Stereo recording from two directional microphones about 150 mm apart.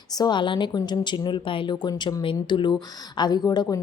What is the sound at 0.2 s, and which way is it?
A woman's voice, 30° left (ahead or behind).